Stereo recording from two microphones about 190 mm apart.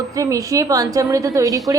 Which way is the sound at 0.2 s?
15° right (ahead or behind).